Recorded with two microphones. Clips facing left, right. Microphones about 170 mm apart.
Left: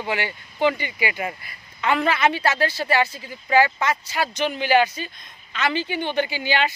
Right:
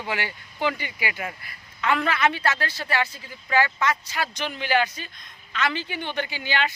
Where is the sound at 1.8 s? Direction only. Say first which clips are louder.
Left 3 dB; 25° left (ahead or behind).